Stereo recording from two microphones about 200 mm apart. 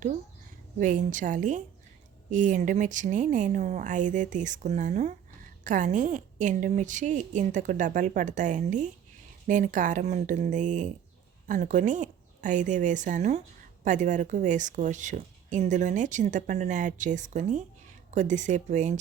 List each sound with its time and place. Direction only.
0.8 s a woman's voice: 40° right (ahead or behind)